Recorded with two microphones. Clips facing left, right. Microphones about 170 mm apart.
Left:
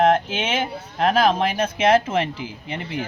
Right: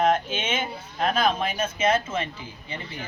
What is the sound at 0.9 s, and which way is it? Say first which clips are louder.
Speech: left 5 dB; 75° left (ahead or behind).